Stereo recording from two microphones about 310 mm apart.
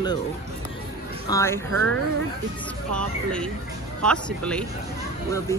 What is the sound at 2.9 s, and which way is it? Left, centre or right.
Speech, centre.